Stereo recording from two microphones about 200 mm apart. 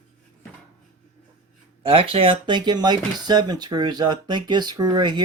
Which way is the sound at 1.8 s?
25° right (ahead or behind).